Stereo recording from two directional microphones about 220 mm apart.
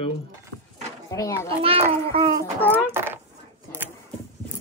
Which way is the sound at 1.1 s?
15° left (ahead or behind).